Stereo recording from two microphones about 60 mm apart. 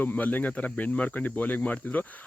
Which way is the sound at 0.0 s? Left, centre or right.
Left.